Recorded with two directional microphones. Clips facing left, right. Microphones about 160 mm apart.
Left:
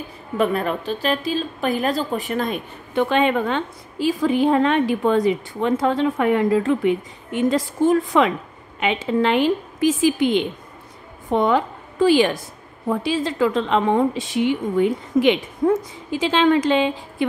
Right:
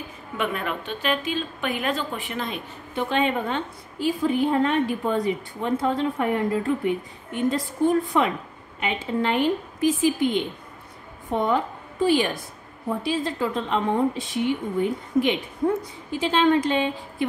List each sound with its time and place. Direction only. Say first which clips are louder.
0.4 s a woman's voice: left 7 dB; 35° left (ahead or behind)
3.0 s a woman's voice: left 5 dB; 70° left (ahead or behind); by 17.3 s 90° left